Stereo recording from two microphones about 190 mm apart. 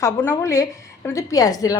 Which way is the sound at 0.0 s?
15° left (ahead or behind).